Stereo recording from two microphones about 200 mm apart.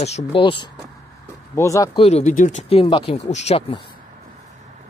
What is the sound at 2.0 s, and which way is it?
Speech, 35° left (ahead or behind).